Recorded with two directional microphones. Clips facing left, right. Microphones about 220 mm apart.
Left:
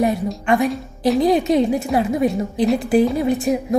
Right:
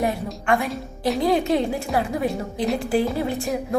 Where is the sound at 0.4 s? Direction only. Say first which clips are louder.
Left 4 dB; 20° left (ahead or behind).